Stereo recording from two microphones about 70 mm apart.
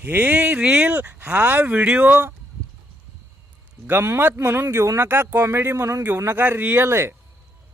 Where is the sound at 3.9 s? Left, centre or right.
Right.